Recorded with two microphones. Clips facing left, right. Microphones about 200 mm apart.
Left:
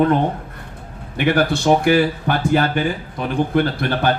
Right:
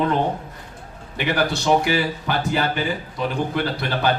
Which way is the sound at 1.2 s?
50° left (ahead or behind).